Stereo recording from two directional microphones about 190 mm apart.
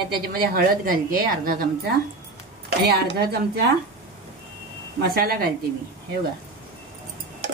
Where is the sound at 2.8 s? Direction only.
60° right (ahead or behind).